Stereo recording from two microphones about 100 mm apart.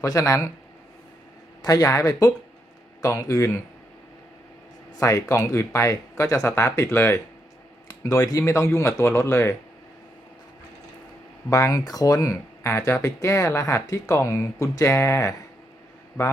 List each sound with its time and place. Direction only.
0.0 s speech: 35° left (ahead or behind)
1.6 s speech: 35° left (ahead or behind)
4.9 s speech: 35° left (ahead or behind)
11.4 s speech: 35° left (ahead or behind)